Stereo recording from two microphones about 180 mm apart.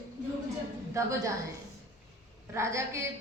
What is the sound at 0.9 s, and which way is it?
Speech, 15° right (ahead or behind).